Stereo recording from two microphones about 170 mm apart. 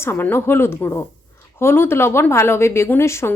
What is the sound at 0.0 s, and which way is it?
A woman's voice, 10° left (ahead or behind).